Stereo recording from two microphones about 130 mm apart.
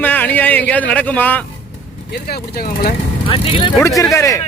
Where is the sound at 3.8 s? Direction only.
25° left (ahead or behind).